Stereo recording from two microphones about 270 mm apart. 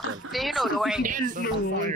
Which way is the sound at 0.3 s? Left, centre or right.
Centre.